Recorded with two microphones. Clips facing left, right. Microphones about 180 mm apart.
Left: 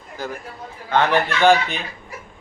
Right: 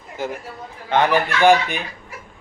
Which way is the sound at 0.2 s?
25° right (ahead or behind).